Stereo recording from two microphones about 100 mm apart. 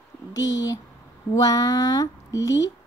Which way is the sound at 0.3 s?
35° left (ahead or behind).